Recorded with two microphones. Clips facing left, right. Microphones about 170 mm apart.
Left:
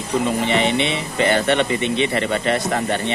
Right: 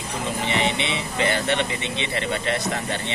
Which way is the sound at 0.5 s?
55° left (ahead or behind).